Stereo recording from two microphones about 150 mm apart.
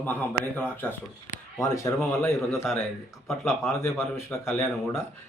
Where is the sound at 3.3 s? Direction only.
Centre (ahead or behind).